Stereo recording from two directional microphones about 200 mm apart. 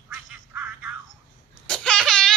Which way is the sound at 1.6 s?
5° left (ahead or behind).